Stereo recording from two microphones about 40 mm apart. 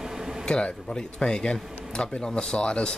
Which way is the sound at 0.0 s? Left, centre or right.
Centre.